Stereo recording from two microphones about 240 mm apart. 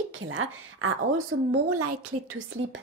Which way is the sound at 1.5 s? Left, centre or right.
Right.